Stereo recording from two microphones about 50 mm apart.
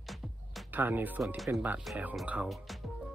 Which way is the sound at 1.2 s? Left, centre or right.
Centre.